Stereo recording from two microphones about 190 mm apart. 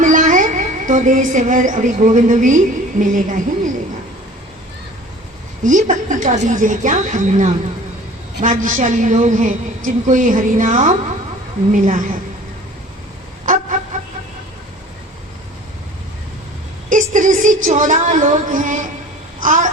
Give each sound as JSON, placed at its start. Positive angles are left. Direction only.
{"t": 0.0, "sound": "a woman's voice", "side_deg": -40}
{"t": 5.6, "sound": "a woman's voice", "side_deg": -40}
{"t": 13.4, "sound": "vehicle", "side_deg": -45}
{"t": 16.9, "sound": "a woman's voice", "side_deg": -40}
{"t": 19.4, "sound": "babbling", "side_deg": -45}